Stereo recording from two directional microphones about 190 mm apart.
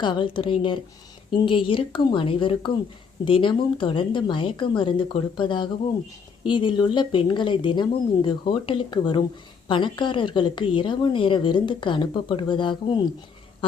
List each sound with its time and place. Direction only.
0.0 s a woman's voice: 25° left (ahead or behind)